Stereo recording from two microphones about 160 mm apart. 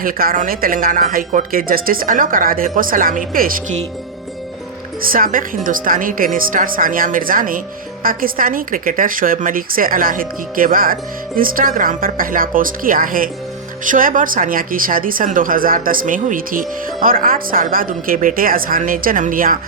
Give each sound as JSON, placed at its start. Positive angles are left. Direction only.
{"t": 0.0, "sound": "speech", "side_deg": -65}
{"t": 4.9, "sound": "speech", "side_deg": -65}